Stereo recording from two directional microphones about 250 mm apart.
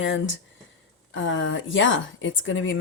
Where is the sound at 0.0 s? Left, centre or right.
Left.